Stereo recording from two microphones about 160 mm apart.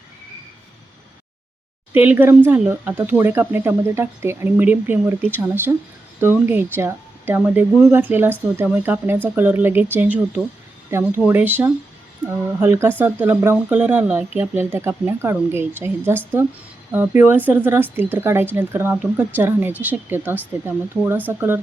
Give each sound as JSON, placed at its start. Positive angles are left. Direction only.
{"t": 1.9, "sound": "speech", "side_deg": -10}